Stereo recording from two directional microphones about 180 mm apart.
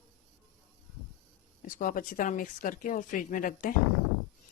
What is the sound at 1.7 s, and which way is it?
Speech, 50° left (ahead or behind).